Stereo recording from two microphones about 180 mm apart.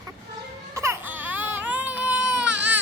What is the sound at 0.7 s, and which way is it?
Baby cry, 15° right (ahead or behind).